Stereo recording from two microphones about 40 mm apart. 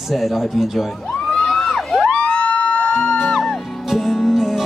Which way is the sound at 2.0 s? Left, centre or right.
Left.